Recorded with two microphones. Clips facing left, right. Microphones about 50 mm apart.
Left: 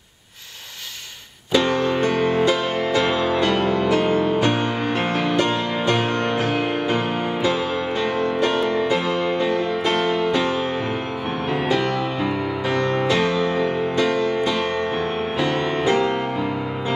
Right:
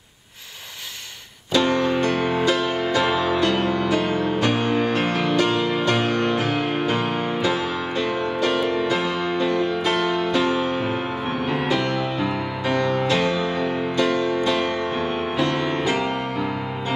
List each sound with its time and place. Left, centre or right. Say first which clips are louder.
1.6 s music: right 2 dB; centre
8.9 s music: left 2 dB; centre
12.9 s music: left 1 dB; centre